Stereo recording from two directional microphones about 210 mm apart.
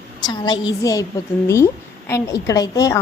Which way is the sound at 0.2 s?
20° left (ahead or behind).